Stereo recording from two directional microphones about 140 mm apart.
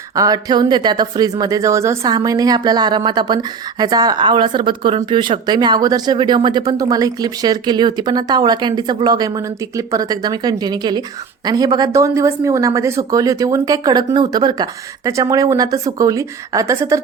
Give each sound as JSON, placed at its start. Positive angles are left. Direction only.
{"t": 0.2, "sound": "speech", "side_deg": -25}